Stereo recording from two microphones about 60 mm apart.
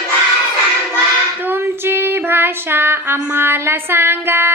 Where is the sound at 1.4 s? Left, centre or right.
Right.